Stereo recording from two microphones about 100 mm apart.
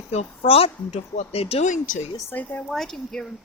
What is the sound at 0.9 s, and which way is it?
Speech, 90° left.